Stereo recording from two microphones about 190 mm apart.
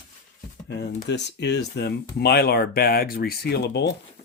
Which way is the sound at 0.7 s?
65° left (ahead or behind).